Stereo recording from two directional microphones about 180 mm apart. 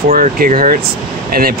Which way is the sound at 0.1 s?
50° right (ahead or behind).